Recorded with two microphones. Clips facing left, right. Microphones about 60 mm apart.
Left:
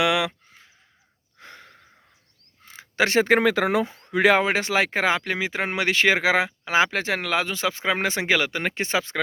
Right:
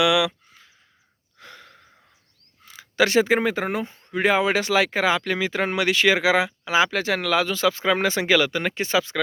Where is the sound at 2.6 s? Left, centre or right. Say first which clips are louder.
Right 2 dB; left.